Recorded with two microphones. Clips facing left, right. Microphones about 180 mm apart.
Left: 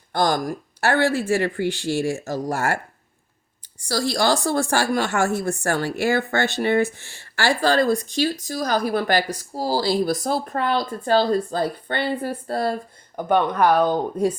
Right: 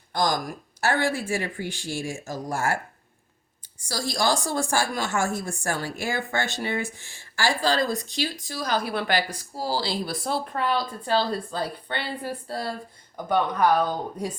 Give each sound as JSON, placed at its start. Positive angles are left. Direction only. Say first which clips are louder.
{"t": 0.1, "sound": "a woman's voice", "louder": "left 4 dB", "side_deg": 60}
{"t": 3.8, "sound": "speech", "louder": "left 5 dB", "side_deg": 70}
{"t": 8.0, "sound": "speech", "louder": "left 7 dB", "side_deg": 45}
{"t": 13.2, "sound": "speech", "louder": "left 4 dB", "side_deg": 65}